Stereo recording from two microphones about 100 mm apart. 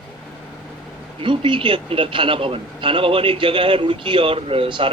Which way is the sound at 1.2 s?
60° right (ahead or behind).